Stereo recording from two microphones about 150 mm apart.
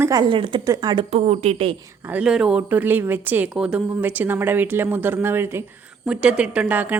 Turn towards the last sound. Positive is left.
turn(degrees=-10)  # may be behind; listen again after turning